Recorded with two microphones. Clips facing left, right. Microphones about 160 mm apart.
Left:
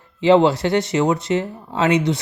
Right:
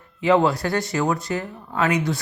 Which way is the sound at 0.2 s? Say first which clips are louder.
Left 4 dB; 25° left (ahead or behind).